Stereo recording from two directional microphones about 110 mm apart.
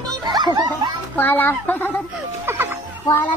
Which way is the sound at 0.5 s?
35° right (ahead or behind).